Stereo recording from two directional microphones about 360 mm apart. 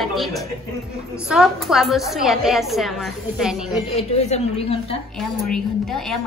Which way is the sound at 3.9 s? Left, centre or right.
Centre.